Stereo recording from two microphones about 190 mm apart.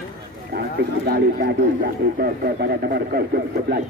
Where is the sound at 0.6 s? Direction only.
55° right (ahead or behind).